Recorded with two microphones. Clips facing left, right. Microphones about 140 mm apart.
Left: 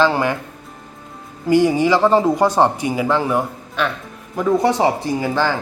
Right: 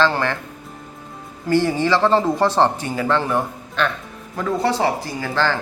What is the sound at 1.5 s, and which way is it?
Speech, 15° left (ahead or behind).